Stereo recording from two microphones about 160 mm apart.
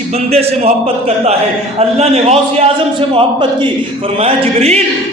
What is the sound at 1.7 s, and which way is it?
Speech, 40° right (ahead or behind).